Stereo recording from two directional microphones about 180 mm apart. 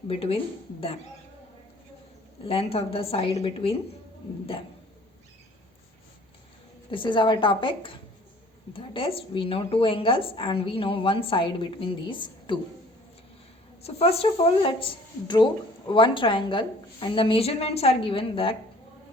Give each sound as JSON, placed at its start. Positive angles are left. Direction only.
{"t": 0.1, "sound": "speech", "side_deg": 30}
{"t": 2.4, "sound": "speech", "side_deg": 30}
{"t": 6.9, "sound": "speech", "side_deg": 25}
{"t": 13.8, "sound": "speech", "side_deg": 35}